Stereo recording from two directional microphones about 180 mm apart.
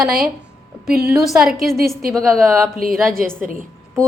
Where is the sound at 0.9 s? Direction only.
60° right (ahead or behind).